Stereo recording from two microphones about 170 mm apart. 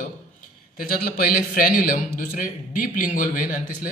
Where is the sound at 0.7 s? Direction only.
55° left (ahead or behind).